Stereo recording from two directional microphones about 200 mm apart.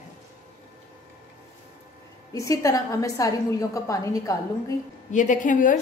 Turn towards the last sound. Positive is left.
turn(degrees=40)  # may be behind; listen again after turning